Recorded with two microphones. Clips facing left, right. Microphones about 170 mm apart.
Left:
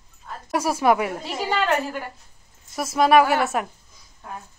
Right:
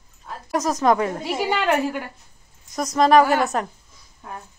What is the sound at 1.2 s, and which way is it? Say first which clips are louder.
Speech: right 2 dB; 10° right (ahead or behind).